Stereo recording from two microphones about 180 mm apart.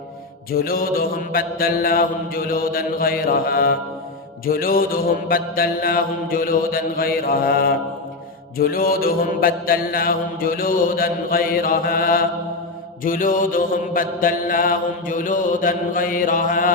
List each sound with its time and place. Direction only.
0.5 s mantra: 55° left (ahead or behind)